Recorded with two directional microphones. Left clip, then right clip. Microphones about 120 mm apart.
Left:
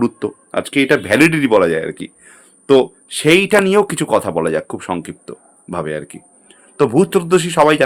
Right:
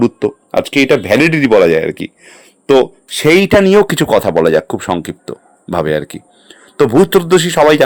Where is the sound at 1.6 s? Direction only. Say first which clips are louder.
Right 6 dB; 55° right (ahead or behind).